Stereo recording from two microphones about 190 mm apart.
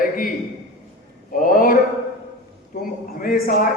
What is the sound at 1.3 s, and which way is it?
Speech, 45° left (ahead or behind).